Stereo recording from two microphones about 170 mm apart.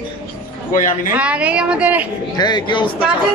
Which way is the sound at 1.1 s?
10° right (ahead or behind).